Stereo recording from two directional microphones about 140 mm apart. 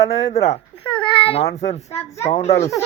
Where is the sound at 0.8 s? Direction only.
35° left (ahead or behind).